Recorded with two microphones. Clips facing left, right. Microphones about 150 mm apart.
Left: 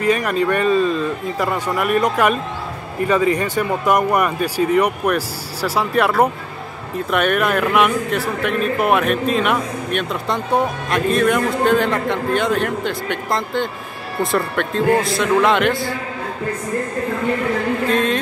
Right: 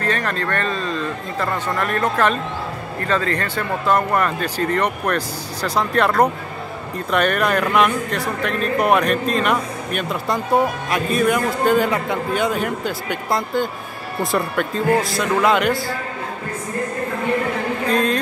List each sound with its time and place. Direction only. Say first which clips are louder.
0.0 s a man's voice: left 5 dB; 10° left (ahead or behind)
17.8 s a man's voice: right 1 dB; centre (ahead or behind)